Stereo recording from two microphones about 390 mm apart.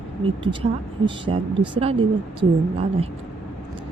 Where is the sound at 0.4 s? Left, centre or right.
Centre.